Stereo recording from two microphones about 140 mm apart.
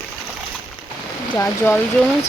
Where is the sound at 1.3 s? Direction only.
20° left (ahead or behind).